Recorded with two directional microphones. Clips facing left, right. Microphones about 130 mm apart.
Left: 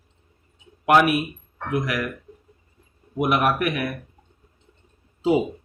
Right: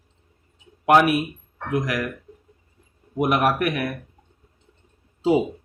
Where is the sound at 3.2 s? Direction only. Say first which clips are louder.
Right 1 dB; 45° right (ahead or behind).